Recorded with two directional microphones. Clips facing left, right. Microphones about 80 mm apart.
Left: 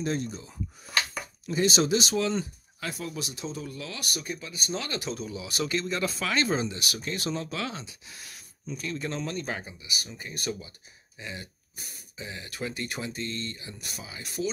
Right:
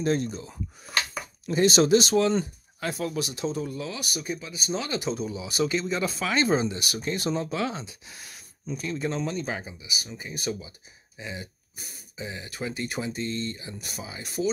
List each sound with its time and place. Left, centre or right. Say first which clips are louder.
1.5 s speech: right 5 dB; right
3.0 s speech: right 6 dB; right
3.6 s speech: right 4 dB; centre